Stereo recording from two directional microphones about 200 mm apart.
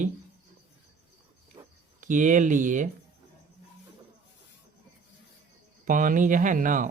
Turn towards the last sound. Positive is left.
turn(degrees=-40)  # may be behind; listen again after turning